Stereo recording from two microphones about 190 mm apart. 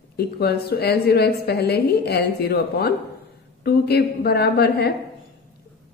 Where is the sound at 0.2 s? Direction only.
60° left (ahead or behind).